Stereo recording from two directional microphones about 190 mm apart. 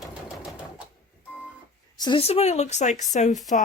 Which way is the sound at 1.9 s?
25° left (ahead or behind).